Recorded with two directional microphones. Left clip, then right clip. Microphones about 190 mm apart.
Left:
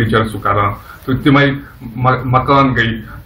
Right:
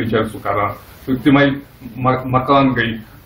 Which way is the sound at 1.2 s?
15° right (ahead or behind).